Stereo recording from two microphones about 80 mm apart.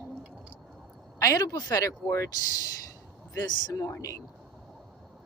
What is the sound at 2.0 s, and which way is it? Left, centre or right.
Speech, left.